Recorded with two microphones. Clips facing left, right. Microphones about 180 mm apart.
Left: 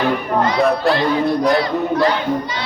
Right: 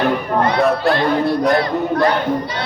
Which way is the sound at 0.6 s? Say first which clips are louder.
Left 1 dB; centre (ahead or behind).